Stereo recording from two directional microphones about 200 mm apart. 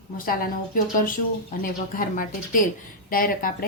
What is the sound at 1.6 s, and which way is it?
A woman's voice, 45° left (ahead or behind).